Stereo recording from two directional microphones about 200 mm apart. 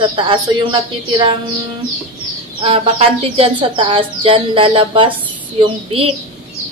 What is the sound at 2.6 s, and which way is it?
Speech, 30° right (ahead or behind).